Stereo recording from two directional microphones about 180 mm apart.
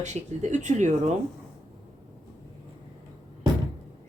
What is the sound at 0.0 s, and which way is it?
A woman's voice, 40° right (ahead or behind).